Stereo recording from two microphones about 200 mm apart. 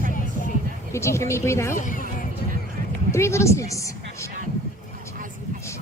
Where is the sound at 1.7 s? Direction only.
40° left (ahead or behind).